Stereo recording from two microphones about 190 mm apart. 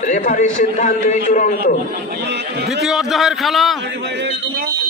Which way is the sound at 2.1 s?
60° right (ahead or behind).